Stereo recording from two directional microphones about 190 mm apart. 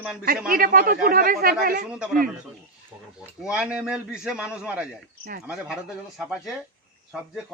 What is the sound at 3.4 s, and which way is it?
Speech, 5° right (ahead or behind).